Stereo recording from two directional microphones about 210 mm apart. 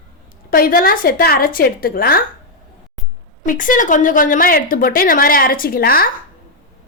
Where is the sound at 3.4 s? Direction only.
40° left (ahead or behind).